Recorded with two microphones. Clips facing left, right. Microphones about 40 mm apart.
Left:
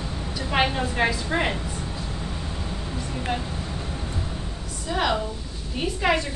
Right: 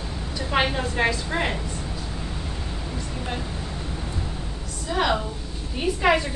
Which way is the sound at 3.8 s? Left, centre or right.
Centre.